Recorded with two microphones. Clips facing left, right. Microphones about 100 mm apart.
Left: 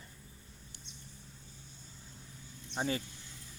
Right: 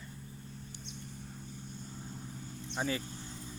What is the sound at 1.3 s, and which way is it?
Vehicle, 55° right (ahead or behind).